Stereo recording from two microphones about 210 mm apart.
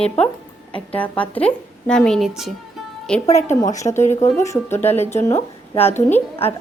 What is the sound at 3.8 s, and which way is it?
Speech, 20° left (ahead or behind).